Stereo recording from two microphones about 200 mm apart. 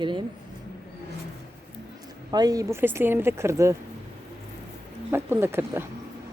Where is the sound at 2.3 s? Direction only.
20° right (ahead or behind).